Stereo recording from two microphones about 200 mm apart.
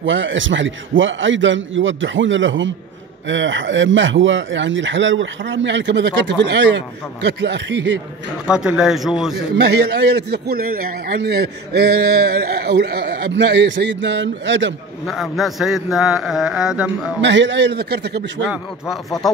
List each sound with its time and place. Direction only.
0.0 s a man's voice: 70° right (ahead or behind)
8.5 s a man's voice: 5° right (ahead or behind)
9.6 s a man's voice: 55° right (ahead or behind)
15.0 s a man's voice: centre (ahead or behind)
17.2 s a man's voice: 65° right (ahead or behind)